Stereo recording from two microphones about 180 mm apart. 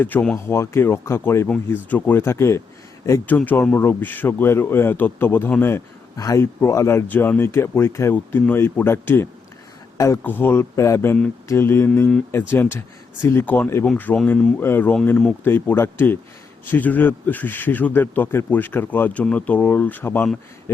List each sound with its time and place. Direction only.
0.0 s a man's voice: 10° left (ahead or behind)